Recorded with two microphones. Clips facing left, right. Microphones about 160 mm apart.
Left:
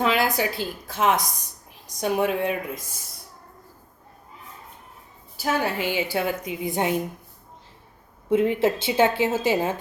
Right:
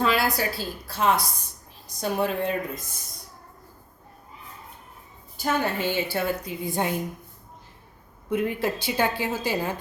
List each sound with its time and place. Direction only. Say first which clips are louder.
0.0 s a woman's voice: left 1 dB; 15° left (ahead or behind)
5.4 s a woman's voice: left 1 dB; 5° left (ahead or behind)
8.3 s a woman's voice: left 5 dB; 25° left (ahead or behind)